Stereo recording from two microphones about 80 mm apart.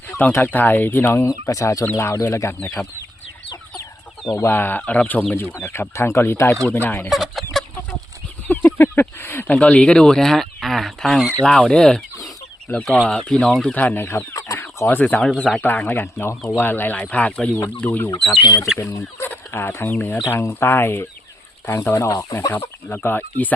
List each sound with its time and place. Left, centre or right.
0.3 s speech: left
1.3 s speech: left
2.6 s speech: centre
4.4 s speech: left
6.7 s speech: left
7.1 s chicken: centre
8.4 s speech: left; by 13.7 s centre
13.7 s speech: left
14.3 s chicken: left
14.8 s speech: left
18.3 s speech: left
19.3 s speech: left
21.8 s speech: left
22.5 s speech: left